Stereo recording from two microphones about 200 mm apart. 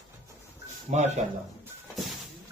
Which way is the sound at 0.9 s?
35° right (ahead or behind).